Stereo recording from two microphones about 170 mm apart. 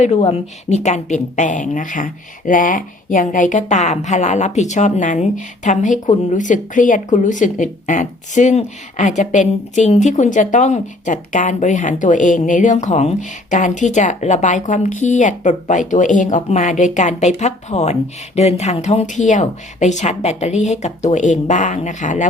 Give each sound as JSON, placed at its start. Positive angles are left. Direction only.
{"t": 0.0, "sound": "a woman's voice", "side_deg": 40}